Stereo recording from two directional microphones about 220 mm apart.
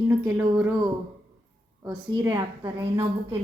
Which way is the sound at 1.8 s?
20° right (ahead or behind).